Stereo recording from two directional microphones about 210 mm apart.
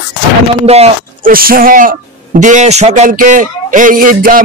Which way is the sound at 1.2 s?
45° right (ahead or behind).